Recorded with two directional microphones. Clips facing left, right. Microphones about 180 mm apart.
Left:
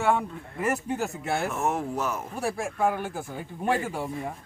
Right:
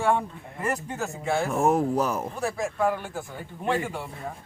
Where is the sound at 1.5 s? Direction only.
35° right (ahead or behind).